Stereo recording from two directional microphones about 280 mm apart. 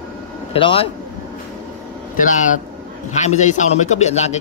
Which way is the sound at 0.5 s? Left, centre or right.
Centre.